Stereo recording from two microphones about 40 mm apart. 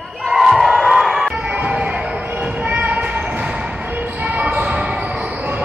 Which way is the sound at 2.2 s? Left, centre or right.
Right.